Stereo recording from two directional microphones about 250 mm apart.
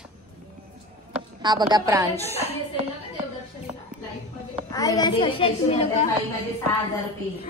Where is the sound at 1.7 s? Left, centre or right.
Centre.